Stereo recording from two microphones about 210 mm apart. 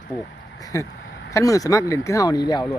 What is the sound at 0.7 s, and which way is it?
A man's voice, 15° left (ahead or behind).